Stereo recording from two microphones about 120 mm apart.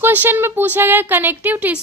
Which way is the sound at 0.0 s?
15° right (ahead or behind).